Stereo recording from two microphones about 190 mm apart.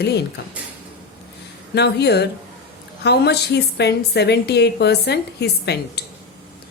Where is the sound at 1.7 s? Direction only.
60° left (ahead or behind).